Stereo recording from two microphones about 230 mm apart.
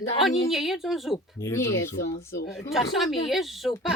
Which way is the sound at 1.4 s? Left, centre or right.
Centre.